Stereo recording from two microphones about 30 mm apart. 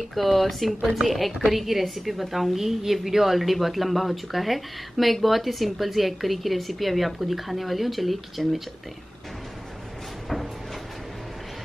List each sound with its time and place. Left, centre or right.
0.1 s a woman's voice: centre